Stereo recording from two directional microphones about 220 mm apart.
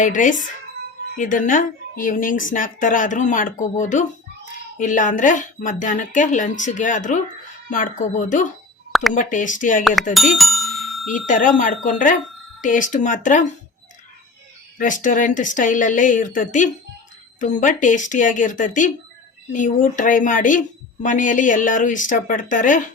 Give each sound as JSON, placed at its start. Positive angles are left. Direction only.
{"t": 0.0, "sound": "speech", "side_deg": 35}
{"t": 10.2, "sound": "bicycle bell", "side_deg": 0}
{"t": 11.3, "sound": "speech", "side_deg": 35}
{"t": 14.8, "sound": "speech", "side_deg": 35}